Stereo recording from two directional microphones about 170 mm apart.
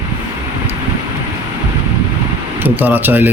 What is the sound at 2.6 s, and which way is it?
Speech, 10° right (ahead or behind).